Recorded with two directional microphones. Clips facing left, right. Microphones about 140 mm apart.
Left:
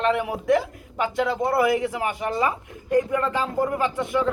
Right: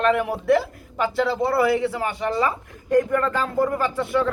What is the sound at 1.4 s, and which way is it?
Speech, 20° left (ahead or behind).